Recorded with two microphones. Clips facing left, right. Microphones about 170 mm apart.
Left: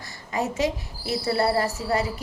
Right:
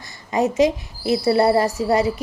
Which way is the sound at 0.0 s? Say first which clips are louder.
Right 7 dB; 20° right (ahead or behind).